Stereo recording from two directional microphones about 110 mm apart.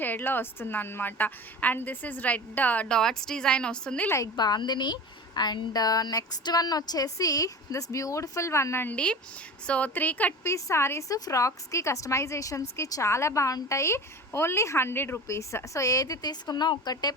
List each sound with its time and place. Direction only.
0.0 s a woman's voice: 15° left (ahead or behind)
4.4 s a woman's voice: 40° left (ahead or behind); by 10.3 s 15° left (ahead or behind)
10.4 s a woman's voice: 25° left (ahead or behind)